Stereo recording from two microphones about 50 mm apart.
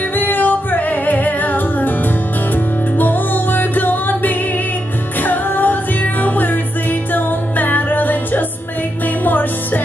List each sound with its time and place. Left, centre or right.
0.1 s music: left